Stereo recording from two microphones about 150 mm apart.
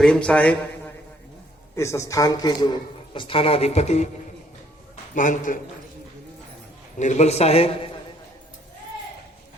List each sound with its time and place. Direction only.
0.0 s a man's voice: 5° left (ahead or behind)
1.7 s a man's voice: 20° left (ahead or behind); by 4.1 s 45° left (ahead or behind)
5.1 s a man's voice: 60° left (ahead or behind)
7.0 s a man's voice: 50° left (ahead or behind)